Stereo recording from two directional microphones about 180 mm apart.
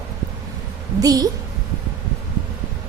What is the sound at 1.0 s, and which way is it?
Speech, 20° right (ahead or behind).